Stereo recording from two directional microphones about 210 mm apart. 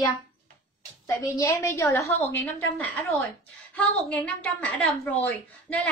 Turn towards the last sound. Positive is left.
turn(degrees=5)  # may be behind; listen again after turning